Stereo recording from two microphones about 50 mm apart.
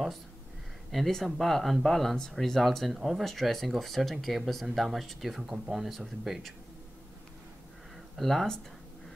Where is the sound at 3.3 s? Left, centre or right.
Centre.